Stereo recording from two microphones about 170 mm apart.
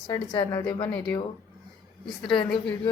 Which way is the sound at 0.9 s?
10° left (ahead or behind).